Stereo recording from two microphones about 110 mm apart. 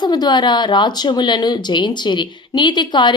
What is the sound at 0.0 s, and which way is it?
Speech, 40° left (ahead or behind).